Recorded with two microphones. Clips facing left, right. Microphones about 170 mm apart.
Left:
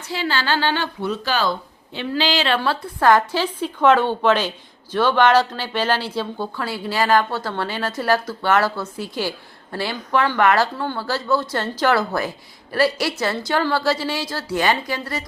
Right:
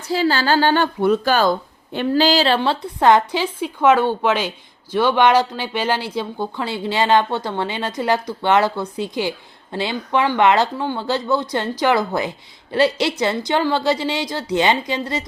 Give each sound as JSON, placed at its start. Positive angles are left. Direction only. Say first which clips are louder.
{"t": 0.1, "sound": "a woman's voice", "louder": "right 5 dB", "side_deg": -40}
{"t": 2.6, "sound": "a woman's voice", "louder": "right 2 dB", "side_deg": -20}